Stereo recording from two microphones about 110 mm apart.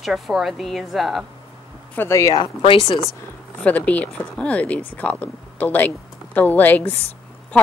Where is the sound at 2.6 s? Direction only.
55° left (ahead or behind).